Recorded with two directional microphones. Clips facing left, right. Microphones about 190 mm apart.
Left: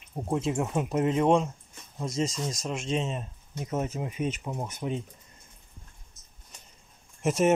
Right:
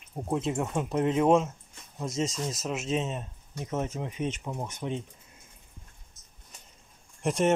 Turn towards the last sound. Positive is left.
turn(degrees=5)  # may be behind; listen again after turning